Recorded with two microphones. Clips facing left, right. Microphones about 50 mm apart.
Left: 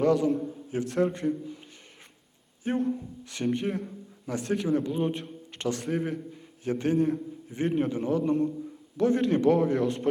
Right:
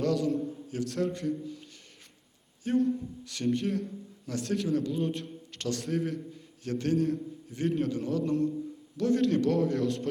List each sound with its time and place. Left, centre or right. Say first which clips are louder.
0.0 s a man's voice: left 4 dB; left
2.6 s a man's voice: right 1 dB; left